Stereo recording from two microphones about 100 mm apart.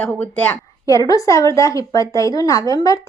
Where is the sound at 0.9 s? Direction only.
35° left (ahead or behind).